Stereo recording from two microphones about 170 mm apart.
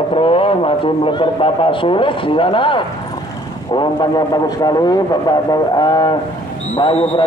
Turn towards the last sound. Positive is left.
turn(degrees=30)  # may be behind; listen again after turning